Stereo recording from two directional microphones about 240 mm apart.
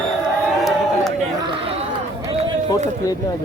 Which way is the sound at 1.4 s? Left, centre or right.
Right.